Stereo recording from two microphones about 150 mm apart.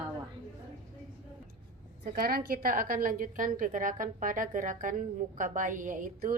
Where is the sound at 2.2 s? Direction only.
80° right.